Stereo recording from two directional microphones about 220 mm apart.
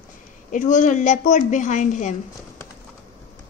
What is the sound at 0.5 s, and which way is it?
A woman's voice, 35° left (ahead or behind).